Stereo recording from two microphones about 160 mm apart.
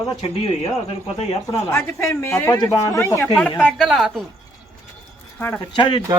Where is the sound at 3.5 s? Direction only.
Centre (ahead or behind).